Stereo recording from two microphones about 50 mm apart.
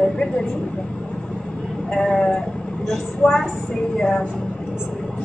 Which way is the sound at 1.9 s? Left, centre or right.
Centre.